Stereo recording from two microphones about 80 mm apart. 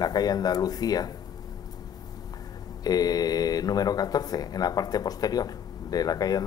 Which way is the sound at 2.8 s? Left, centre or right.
Left.